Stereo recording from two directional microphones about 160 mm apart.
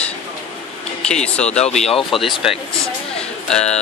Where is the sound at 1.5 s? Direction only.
40° left (ahead or behind).